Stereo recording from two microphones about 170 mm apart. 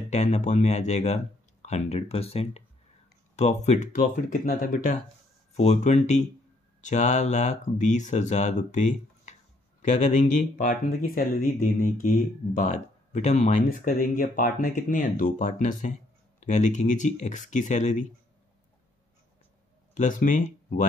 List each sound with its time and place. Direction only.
0.1 s speech: 40° left (ahead or behind)
4.0 s speech: 55° left (ahead or behind)
5.6 s speech: 40° left (ahead or behind)
19.9 s speech: 50° left (ahead or behind)